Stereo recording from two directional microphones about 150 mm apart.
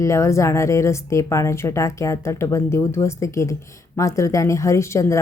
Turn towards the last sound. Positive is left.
turn(degrees=20)  # may be behind; listen again after turning